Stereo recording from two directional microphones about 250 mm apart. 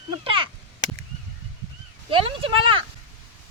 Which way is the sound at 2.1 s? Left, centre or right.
Right.